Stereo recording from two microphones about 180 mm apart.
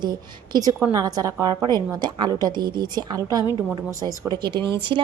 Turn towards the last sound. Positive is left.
turn(degrees=-25)  # may be behind; listen again after turning